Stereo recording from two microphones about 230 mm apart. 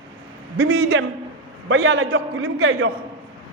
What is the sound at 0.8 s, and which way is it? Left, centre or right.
Speech, right.